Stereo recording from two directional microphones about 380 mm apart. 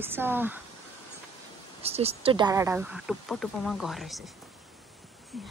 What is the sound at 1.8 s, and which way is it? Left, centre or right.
Speech, centre.